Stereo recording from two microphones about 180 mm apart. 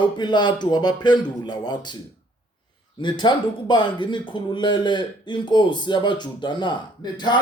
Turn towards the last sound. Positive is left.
turn(degrees=25)  # may be behind; listen again after turning